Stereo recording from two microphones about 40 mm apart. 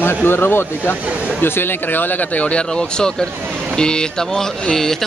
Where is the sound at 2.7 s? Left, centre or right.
Centre.